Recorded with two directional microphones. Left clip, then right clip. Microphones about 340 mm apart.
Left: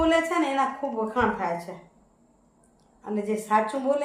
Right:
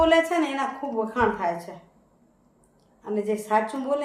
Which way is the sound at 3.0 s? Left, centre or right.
Centre.